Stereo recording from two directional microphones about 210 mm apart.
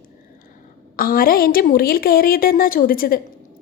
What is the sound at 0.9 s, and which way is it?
A woman's voice, 45° left (ahead or behind).